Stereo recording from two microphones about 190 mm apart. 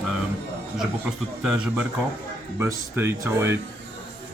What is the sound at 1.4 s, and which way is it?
A man's voice, 5° right (ahead or behind).